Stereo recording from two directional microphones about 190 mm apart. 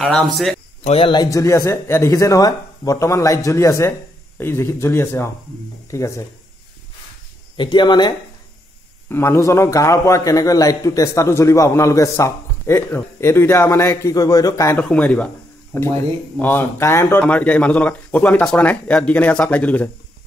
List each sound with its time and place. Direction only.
0.0 s speech: centre (ahead or behind)
0.8 s a man's voice: 30° left (ahead or behind)
7.5 s speech: 25° left (ahead or behind)
9.1 s a man's voice: 15° left (ahead or behind)